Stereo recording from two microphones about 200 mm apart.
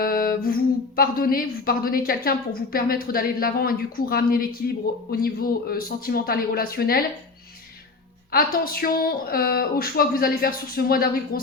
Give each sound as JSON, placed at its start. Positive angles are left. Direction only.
{"t": 0.0, "sound": "speech", "side_deg": 45}
{"t": 8.3, "sound": "speech", "side_deg": 45}